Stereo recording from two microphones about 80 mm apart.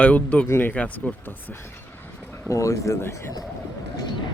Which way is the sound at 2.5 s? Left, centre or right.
Left.